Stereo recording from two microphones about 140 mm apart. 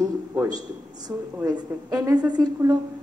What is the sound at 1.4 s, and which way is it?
Speech, 25° right (ahead or behind).